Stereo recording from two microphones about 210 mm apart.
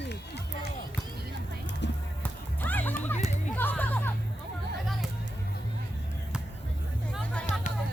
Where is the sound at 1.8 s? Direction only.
55° left (ahead or behind).